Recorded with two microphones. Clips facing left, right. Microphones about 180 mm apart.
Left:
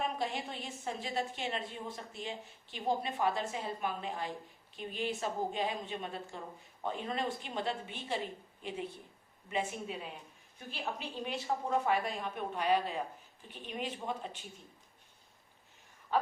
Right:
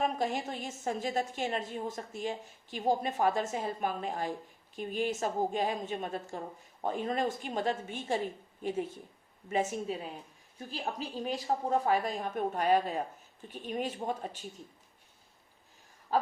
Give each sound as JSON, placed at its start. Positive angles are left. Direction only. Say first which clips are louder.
{"t": 0.0, "sound": "a woman's voice", "louder": "right 5 dB", "side_deg": -45}
{"t": 11.3, "sound": "a woman's voice", "louder": "right 3 dB", "side_deg": -40}
{"t": 16.1, "sound": "a sound", "louder": "right 2 dB", "side_deg": -40}